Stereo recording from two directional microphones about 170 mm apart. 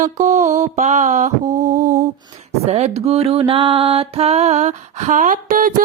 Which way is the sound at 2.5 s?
40° right (ahead or behind).